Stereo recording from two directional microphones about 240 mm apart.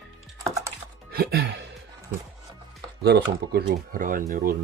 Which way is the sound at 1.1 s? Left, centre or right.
Right.